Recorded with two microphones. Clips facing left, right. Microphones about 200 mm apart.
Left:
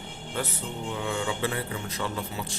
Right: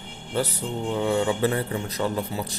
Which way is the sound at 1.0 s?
35° right (ahead or behind).